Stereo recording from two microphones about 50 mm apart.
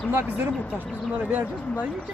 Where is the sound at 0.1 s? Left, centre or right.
Right.